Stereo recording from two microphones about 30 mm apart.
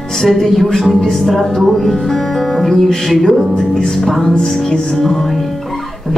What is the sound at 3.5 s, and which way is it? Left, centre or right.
Music, left.